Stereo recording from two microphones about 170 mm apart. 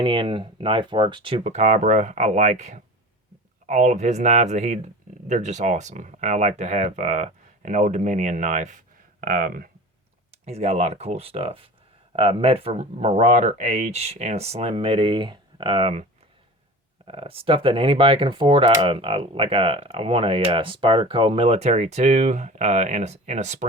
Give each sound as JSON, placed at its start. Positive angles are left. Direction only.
{"t": 0.0, "sound": "speech", "side_deg": -30}
{"t": 9.2, "sound": "speech", "side_deg": -60}
{"t": 10.4, "sound": "speech", "side_deg": -40}
{"t": 17.1, "sound": "speech", "side_deg": -35}